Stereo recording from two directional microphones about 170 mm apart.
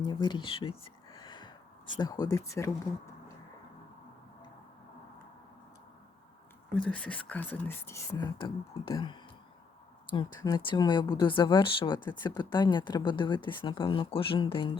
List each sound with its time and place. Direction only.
0.0 s a sound: 25° left (ahead or behind)
2.0 s speech: 25° left (ahead or behind)
6.8 s speech: 5° left (ahead or behind); by 14.8 s 30° left (ahead or behind)